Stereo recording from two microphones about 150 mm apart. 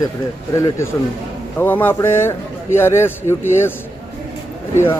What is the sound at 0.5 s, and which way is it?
A man's voice, 20° left (ahead or behind).